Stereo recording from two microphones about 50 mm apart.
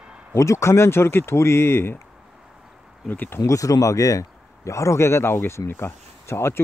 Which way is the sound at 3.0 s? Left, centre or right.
Left.